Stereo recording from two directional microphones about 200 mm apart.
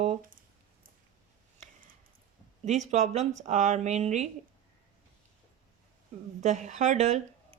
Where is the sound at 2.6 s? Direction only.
35° right (ahead or behind).